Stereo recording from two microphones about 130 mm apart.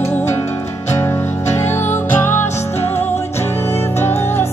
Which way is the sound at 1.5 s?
20° left (ahead or behind).